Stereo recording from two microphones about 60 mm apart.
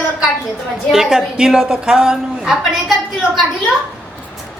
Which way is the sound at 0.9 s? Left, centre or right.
Centre.